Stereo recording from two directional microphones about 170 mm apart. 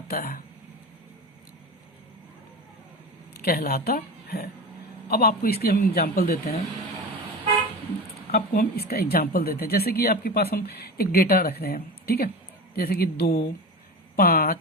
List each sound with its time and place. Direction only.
0.1 s speech: 65° left (ahead or behind)
3.4 s a woman's voice: 65° left (ahead or behind)
8.3 s speech: 60° left (ahead or behind)